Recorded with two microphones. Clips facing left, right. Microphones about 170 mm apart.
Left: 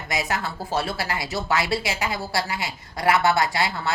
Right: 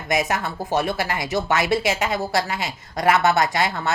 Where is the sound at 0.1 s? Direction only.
20° right (ahead or behind).